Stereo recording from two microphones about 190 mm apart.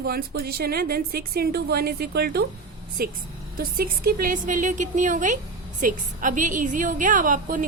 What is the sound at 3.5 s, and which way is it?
A woman's voice, 50° right (ahead or behind).